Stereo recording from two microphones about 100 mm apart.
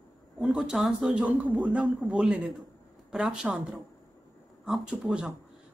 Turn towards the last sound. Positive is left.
turn(degrees=-5)  # may be behind; listen again after turning